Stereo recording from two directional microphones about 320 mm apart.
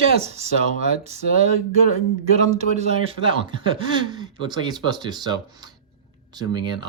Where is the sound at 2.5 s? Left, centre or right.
Centre.